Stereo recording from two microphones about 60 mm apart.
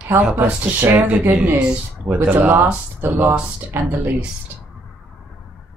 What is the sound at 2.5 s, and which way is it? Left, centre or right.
Speech, right.